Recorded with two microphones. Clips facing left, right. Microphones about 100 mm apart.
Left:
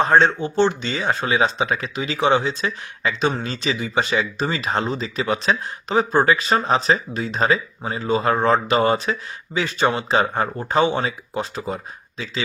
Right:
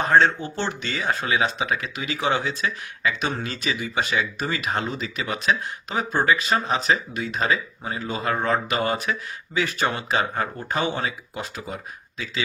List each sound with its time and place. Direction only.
0.0 s speech: 20° left (ahead or behind)